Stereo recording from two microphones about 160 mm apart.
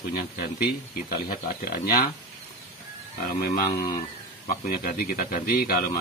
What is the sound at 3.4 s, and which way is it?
Speech, 70° left (ahead or behind).